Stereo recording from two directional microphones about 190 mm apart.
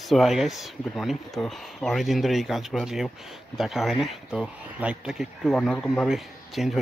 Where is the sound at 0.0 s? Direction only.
Centre (ahead or behind).